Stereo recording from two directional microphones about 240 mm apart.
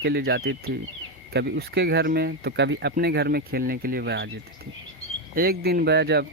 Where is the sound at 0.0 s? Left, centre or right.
Right.